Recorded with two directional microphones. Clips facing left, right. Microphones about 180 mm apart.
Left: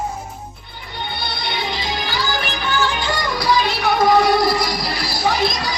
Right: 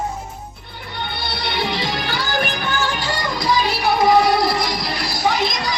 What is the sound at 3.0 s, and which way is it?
Music, 25° right (ahead or behind).